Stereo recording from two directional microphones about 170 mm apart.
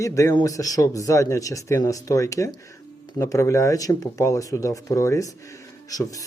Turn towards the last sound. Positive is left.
turn(degrees=20)  # may be behind; listen again after turning